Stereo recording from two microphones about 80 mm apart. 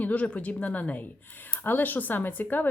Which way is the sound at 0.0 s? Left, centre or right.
Centre.